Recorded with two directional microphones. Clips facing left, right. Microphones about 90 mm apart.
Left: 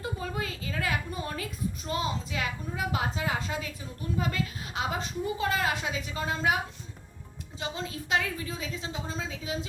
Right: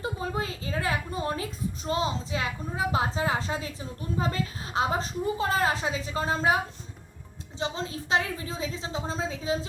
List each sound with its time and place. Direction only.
0.0 s a woman's voice: 25° right (ahead or behind)
7.6 s a woman's voice: 30° right (ahead or behind)